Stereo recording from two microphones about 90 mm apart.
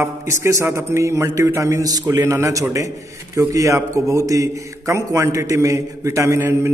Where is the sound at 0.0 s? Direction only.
30° right (ahead or behind).